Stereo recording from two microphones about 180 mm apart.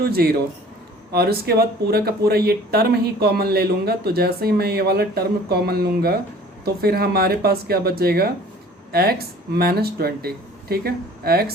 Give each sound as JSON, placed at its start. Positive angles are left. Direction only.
{"t": 0.0, "sound": "speech", "side_deg": -60}